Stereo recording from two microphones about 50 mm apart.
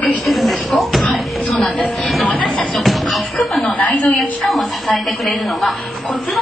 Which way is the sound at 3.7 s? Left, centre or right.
Left.